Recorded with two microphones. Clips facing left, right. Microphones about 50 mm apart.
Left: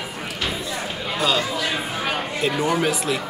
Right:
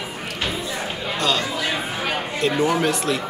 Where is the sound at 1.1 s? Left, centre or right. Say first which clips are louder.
Left 1 dB; centre.